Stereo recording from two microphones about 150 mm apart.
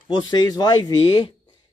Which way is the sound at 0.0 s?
30° left (ahead or behind).